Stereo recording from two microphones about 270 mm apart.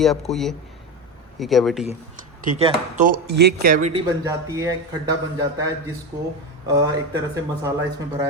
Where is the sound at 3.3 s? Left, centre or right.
Right.